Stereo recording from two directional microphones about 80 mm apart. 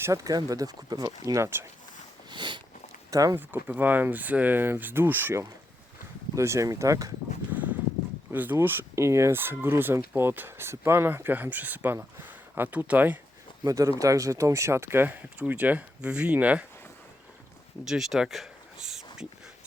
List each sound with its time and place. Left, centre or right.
0.0 s speech: right
2.3 s a sound: right
3.1 s speech: right
3.3 s speech: right
7.5 s clip-clop: centre
8.3 s speech: right
13.7 s speech: right; by 16.6 s centre
17.8 s speech: centre